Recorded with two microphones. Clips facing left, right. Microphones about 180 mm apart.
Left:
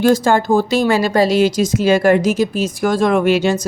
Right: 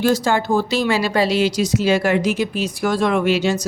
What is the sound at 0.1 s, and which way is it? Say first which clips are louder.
Speech: left 4 dB; 50° left (ahead or behind).